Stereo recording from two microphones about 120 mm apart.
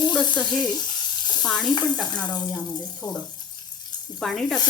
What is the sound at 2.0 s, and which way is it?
Speech, 35° left (ahead or behind).